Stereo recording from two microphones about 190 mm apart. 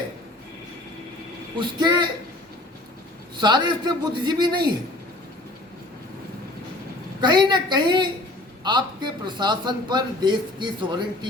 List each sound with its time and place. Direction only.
1.5 s a man's voice: 25° right (ahead or behind)
3.3 s a man's voice: 25° right (ahead or behind)
7.2 s a man's voice: 25° right (ahead or behind)